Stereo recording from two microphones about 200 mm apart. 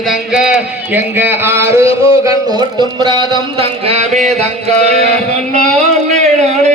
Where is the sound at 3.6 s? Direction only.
35° right (ahead or behind).